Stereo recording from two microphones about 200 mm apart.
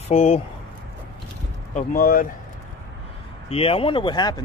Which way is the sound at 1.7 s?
40° left (ahead or behind).